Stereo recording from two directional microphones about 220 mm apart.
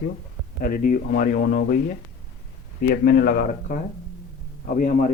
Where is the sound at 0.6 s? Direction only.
40° left (ahead or behind).